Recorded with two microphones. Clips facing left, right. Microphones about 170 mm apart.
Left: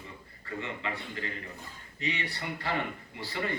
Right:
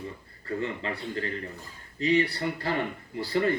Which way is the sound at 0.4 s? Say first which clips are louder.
Right 6 dB; 40° right (ahead or behind).